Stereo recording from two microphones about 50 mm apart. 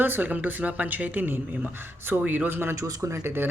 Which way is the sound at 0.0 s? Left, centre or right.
Right.